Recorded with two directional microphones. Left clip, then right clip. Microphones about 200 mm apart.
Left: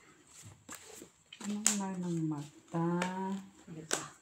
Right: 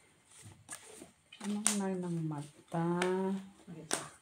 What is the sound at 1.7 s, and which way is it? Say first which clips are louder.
Speech: left 2 dB; 25° left (ahead or behind).